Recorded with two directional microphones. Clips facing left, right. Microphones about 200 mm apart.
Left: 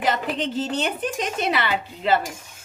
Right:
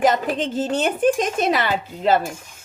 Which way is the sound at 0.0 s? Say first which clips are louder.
Right 5 dB; 45° right (ahead or behind).